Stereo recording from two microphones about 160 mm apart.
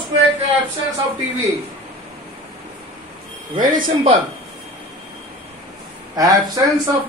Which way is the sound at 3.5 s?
55° right (ahead or behind).